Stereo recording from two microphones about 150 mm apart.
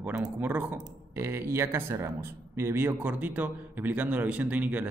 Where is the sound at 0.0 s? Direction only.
10° right (ahead or behind).